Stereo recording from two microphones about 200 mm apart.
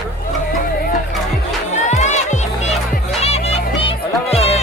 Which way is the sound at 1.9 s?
35° left (ahead or behind).